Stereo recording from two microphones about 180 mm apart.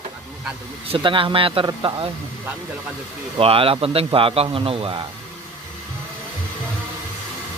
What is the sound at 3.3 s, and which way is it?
A man's voice, 30° right (ahead or behind).